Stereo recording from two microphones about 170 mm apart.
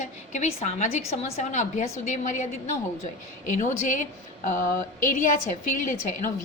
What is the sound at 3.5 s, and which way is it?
Speech, 50° left (ahead or behind).